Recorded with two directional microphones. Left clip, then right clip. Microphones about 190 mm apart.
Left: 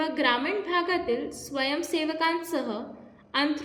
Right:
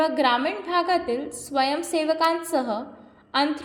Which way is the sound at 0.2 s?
15° right (ahead or behind).